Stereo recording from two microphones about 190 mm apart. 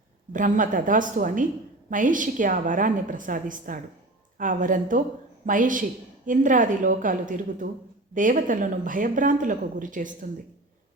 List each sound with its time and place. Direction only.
0.3 s speech: 45° right (ahead or behind)